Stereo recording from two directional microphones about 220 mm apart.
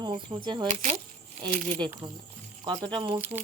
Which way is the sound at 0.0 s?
20° right (ahead or behind).